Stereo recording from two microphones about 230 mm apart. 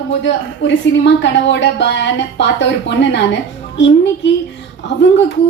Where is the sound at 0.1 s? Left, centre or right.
Left.